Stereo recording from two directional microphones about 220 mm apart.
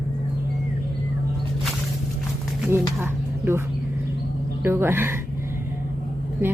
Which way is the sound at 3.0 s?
10° right (ahead or behind).